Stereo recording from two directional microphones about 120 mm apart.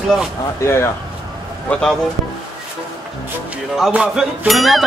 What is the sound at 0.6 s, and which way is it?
Speech, 20° left (ahead or behind).